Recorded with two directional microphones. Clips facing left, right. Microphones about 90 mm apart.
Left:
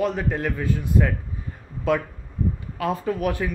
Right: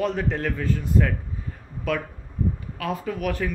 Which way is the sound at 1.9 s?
25° left (ahead or behind).